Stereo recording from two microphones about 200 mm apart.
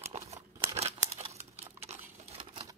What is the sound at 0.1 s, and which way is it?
Crumpling, 30° right (ahead or behind).